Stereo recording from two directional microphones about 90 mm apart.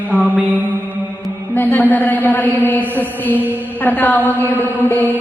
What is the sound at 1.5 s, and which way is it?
A man's voice, 20° left (ahead or behind).